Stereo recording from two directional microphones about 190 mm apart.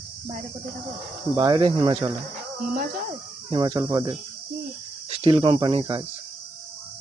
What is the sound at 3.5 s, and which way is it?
Speech, 25° right (ahead or behind).